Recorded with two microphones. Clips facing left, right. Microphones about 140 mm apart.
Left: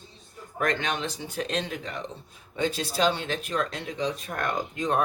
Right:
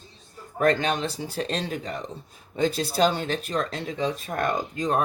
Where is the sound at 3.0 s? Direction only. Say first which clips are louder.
Right 3 dB; 40° right (ahead or behind).